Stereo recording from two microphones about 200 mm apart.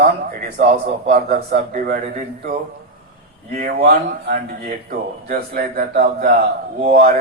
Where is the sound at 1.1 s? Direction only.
45° right (ahead or behind).